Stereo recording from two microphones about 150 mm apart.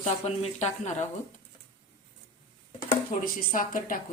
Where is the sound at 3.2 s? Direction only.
65° left (ahead or behind).